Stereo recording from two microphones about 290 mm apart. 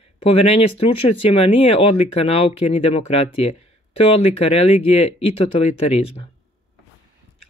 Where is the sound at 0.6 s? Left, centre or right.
Left.